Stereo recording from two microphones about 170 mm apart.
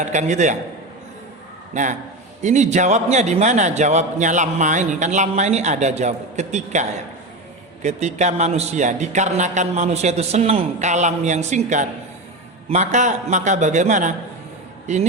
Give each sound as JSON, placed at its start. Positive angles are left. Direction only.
{"t": 0.0, "sound": "a man's voice", "side_deg": -45}
{"t": 1.7, "sound": "a man's voice", "side_deg": -45}